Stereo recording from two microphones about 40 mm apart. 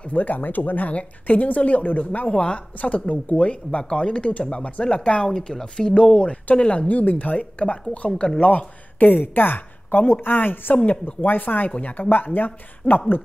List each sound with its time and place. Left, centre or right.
0.1 s speech: left
6.9 s speech: left
10.9 s speech: left